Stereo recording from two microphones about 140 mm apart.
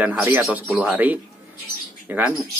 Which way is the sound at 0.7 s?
Centre (ahead or behind).